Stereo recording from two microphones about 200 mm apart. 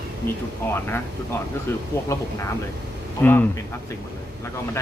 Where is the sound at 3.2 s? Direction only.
10° left (ahead or behind).